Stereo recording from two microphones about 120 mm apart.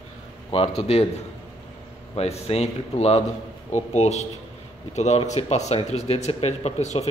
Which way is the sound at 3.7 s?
70° left (ahead or behind).